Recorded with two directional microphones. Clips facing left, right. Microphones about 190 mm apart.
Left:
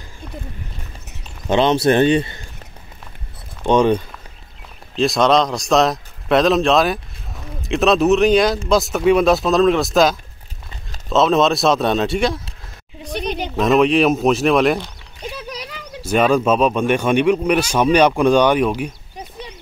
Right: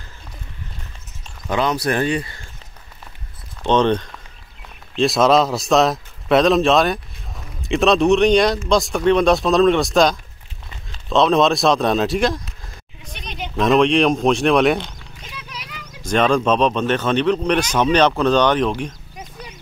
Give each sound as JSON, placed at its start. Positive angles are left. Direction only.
{"t": 1.5, "sound": "speech", "side_deg": 25}
{"t": 3.6, "sound": "a man's voice", "side_deg": 10}
{"t": 13.6, "sound": "a man's voice", "side_deg": 5}
{"t": 15.3, "sound": "horse", "side_deg": 35}
{"t": 16.0, "sound": "speech", "side_deg": 5}